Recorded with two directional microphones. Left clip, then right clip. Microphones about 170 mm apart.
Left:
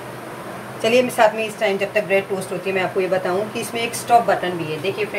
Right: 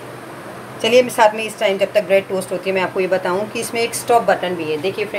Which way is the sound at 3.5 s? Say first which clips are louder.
Right 3 dB; 65° right (ahead or behind).